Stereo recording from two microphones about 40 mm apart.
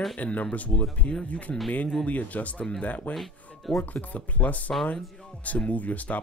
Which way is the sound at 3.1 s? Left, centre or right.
Centre.